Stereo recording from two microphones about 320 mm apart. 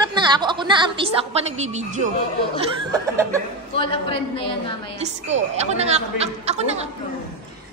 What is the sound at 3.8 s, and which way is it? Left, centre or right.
Speech, centre.